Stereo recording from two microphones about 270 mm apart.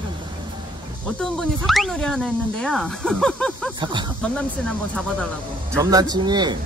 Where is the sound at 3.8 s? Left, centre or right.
Centre.